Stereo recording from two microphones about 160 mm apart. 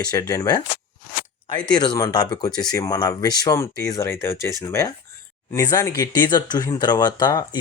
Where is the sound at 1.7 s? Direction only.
25° left (ahead or behind).